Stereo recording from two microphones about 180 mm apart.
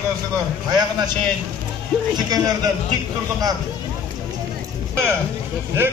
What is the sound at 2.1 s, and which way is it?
Speech, 20° right (ahead or behind).